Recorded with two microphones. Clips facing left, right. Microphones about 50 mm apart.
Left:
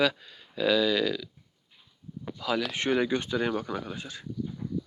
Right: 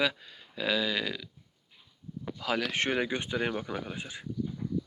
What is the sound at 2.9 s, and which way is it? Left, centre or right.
Speech, right.